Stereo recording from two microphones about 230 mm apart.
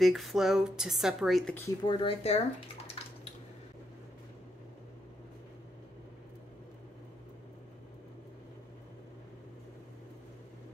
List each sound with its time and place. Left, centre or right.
0.0 s speech: centre
1.9 s speech: left